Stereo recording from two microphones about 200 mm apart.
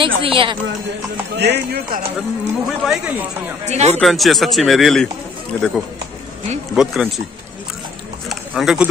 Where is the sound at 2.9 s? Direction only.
10° right (ahead or behind).